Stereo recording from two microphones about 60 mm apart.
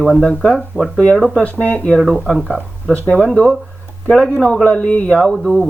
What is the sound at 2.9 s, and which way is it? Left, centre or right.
Speech, centre.